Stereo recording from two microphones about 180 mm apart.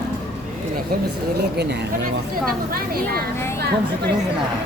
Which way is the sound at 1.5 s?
65° right (ahead or behind).